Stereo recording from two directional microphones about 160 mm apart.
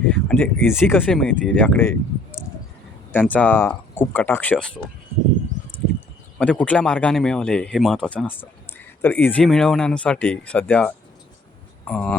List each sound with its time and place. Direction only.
0.1 s speech: 10° left (ahead or behind)
1.0 s speech: 5° left (ahead or behind)
6.4 s speech: 10° left (ahead or behind)